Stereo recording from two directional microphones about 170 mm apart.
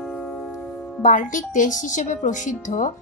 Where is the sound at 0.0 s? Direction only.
5° left (ahead or behind).